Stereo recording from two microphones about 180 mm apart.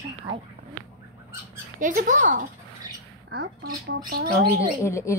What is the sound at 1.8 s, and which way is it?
Speech, 45° right (ahead or behind).